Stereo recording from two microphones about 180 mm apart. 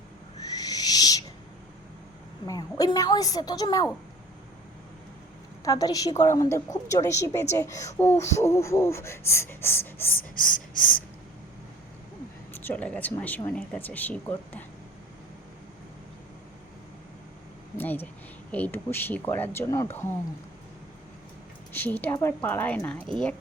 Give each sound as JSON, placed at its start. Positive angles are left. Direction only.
{"t": 0.3, "sound": "owl", "side_deg": 20}
{"t": 2.5, "sound": "a woman's voice", "side_deg": 20}
{"t": 5.6, "sound": "a woman's voice", "side_deg": 20}
{"t": 10.3, "sound": "a sound", "side_deg": 50}
{"t": 12.5, "sound": "speech", "side_deg": 10}
{"t": 17.7, "sound": "speech", "side_deg": 10}
{"t": 21.7, "sound": "a woman's voice", "side_deg": 10}